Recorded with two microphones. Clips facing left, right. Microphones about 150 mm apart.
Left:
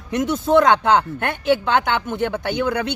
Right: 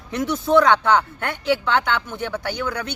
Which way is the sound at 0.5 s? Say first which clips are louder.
Left 1 dB; 55° left (ahead or behind).